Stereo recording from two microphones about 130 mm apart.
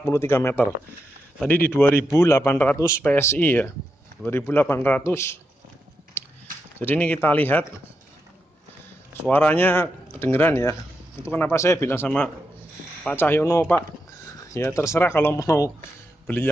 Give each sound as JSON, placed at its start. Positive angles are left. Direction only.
{"t": 0.0, "sound": "a man's voice", "side_deg": 20}
{"t": 6.8, "sound": "a man's voice", "side_deg": 10}
{"t": 9.3, "sound": "a man's voice", "side_deg": 15}